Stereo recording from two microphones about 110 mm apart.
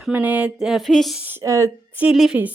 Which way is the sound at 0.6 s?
Centre (ahead or behind).